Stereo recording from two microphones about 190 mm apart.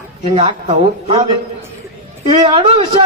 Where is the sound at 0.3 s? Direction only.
30° right (ahead or behind).